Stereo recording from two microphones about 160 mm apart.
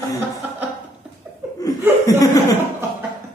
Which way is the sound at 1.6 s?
20° left (ahead or behind).